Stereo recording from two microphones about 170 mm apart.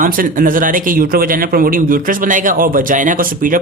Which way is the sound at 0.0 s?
55° right (ahead or behind).